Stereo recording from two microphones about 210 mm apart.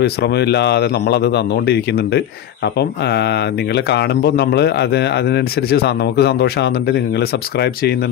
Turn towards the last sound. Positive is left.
turn(degrees=50)  # may be behind; listen again after turning